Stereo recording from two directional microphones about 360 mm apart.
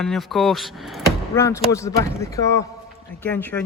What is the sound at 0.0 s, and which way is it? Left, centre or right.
A man's voice, centre.